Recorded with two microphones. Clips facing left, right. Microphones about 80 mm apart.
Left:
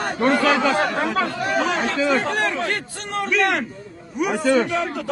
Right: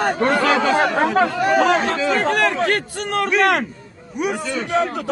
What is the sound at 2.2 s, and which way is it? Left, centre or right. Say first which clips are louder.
Speech: right 4 dB; right.